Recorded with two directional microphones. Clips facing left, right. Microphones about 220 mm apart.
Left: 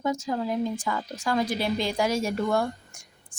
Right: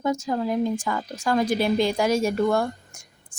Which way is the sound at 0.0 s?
50° right (ahead or behind).